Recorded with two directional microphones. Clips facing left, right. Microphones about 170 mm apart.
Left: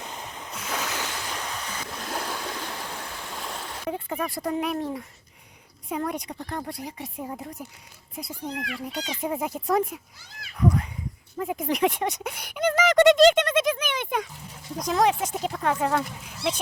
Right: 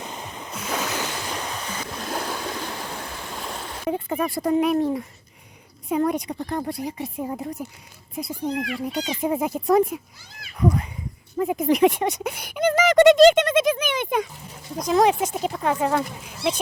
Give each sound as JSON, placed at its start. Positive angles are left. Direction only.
{"t": 0.0, "sound": "waves", "side_deg": -15}
{"t": 0.8, "sound": "waves", "side_deg": -25}
{"t": 2.0, "sound": "stream", "side_deg": -40}
{"t": 3.8, "sound": "speech", "side_deg": -20}